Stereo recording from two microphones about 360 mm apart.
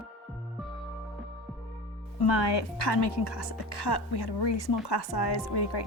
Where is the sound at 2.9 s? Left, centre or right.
Left.